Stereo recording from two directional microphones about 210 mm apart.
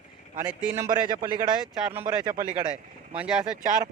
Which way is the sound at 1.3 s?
15° right (ahead or behind).